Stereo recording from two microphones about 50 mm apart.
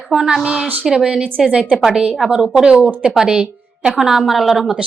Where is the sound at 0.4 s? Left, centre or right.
Centre.